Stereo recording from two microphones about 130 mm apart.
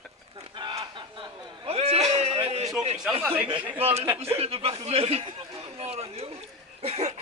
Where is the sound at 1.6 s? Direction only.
50° right (ahead or behind).